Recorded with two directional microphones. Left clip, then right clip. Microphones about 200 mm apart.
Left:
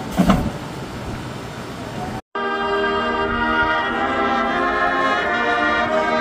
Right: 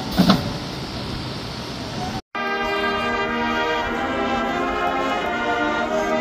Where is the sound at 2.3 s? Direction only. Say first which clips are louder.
Left 2 dB; 50° right (ahead or behind).